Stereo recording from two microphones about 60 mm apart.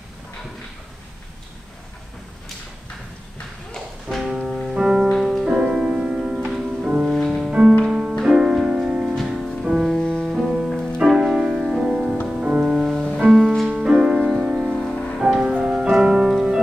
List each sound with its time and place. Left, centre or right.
4.2 s music: centre
5.0 s music: centre
5.4 s music: centre
9.8 s music: centre
10.2 s music: centre
10.7 s music: centre
11.1 s music: centre
12.8 s music: centre
14.9 s music: centre
15.1 s music: centre